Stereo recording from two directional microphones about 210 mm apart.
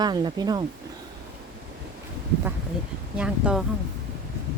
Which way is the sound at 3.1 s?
5° right (ahead or behind).